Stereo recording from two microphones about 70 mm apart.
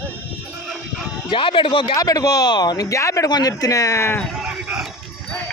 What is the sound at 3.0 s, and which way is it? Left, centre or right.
Speech, left.